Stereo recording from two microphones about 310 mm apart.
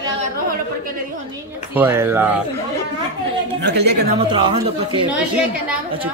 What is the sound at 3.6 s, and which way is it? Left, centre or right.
Speech, right.